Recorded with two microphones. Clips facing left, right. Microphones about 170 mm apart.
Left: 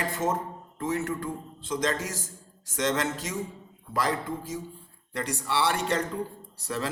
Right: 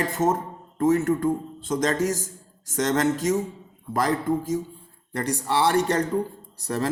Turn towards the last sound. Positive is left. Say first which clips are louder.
# right 5 dB
turn(degrees=-45)  # may be behind; listen again after turning